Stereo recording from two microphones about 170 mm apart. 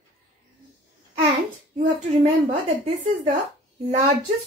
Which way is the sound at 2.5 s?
50° right (ahead or behind).